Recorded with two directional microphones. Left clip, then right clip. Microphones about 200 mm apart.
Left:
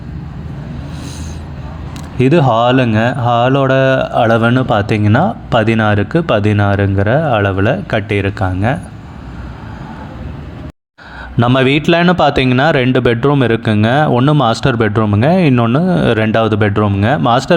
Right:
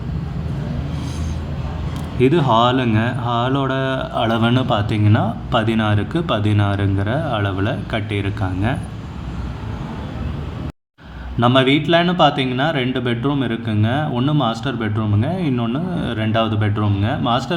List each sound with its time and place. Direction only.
2.1 s speech: 35° left (ahead or behind)
11.3 s a man's voice: 45° left (ahead or behind)